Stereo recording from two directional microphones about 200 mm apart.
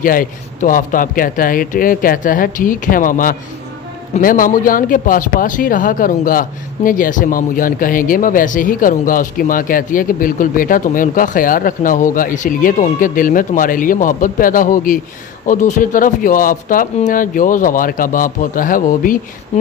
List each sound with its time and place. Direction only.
0.0 s speech: 45° left (ahead or behind)